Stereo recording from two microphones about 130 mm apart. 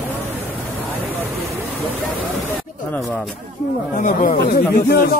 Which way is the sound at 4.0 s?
90° left.